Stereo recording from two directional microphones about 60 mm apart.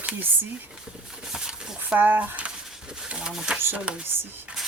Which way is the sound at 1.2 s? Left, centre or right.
Centre.